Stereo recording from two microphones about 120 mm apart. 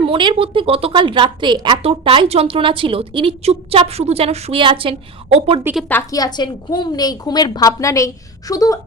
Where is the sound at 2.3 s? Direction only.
55° right (ahead or behind).